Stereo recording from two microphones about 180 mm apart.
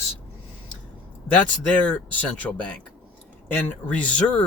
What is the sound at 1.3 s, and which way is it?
Speech, 5° left (ahead or behind).